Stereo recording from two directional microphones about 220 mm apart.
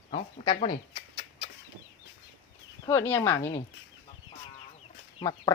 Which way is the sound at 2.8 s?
10° left (ahead or behind).